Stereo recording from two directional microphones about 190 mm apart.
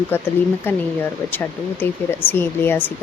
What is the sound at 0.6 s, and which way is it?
Speech, 10° left (ahead or behind).